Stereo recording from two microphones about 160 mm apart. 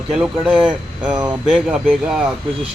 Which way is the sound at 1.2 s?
25° right (ahead or behind).